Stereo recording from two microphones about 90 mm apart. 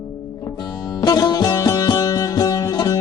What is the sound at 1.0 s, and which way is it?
Music, 45° left (ahead or behind).